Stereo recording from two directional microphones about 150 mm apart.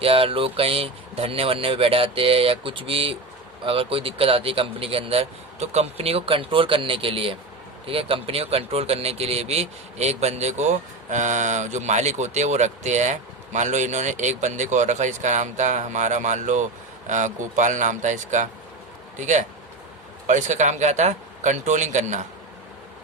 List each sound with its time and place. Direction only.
0.0 s speech: 40° right (ahead or behind)